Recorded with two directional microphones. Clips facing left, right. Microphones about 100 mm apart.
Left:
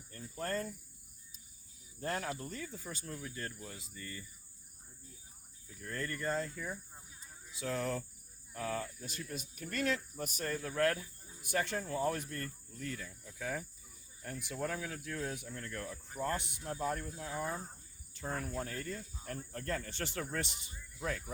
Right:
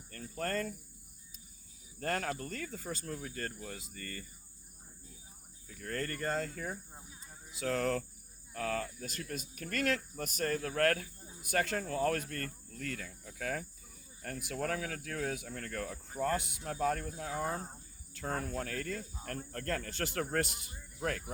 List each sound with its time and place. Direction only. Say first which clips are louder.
0.1 s cricket: right 2 dB; 70° right (ahead or behind)
2.0 s speech: right 3 dB; 65° right (ahead or behind)
3.2 s speech: right 2 dB; 55° right (ahead or behind)
5.6 s speech: right 3 dB; 65° right (ahead or behind)
7.6 s speech: right 4 dB; 75° right (ahead or behind)
11.5 s speech: right 2 dB; 85° right; by 17.4 s 70° right (ahead or behind)
18.6 s speech: right 3 dB; 90° right; by 21.3 s 65° right (ahead or behind)